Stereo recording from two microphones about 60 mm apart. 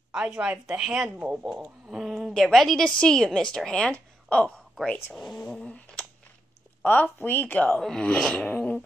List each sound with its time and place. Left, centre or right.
0.1 s speech: centre
1.4 s a woman's voice: centre
2.8 s a woman's voice: centre
5.1 s a woman's voice: centre
5.5 s cat: centre
6.8 s speech: left
7.7 s a woman's voice: centre
8.5 s beatboxing: left